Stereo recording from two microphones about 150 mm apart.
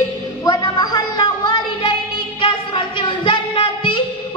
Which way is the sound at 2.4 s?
35° left (ahead or behind).